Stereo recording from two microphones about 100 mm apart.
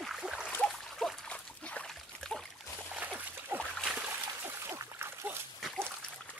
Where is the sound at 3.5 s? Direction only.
25° right (ahead or behind).